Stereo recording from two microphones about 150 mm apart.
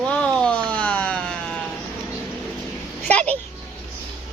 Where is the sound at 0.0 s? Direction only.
5° left (ahead or behind).